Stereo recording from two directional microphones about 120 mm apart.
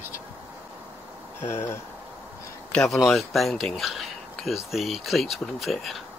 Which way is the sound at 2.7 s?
5° left (ahead or behind).